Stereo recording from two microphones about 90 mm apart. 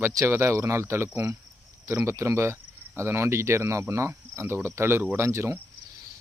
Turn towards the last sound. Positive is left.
turn(degrees=-30)  # may be behind; listen again after turning